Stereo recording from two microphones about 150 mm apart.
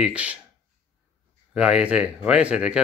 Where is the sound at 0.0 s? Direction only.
10° right (ahead or behind).